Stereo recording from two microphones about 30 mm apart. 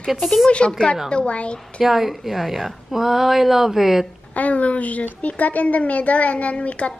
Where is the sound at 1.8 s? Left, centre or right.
Centre.